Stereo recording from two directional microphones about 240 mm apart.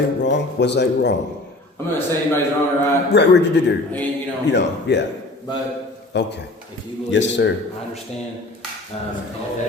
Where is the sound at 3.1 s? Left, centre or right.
Left.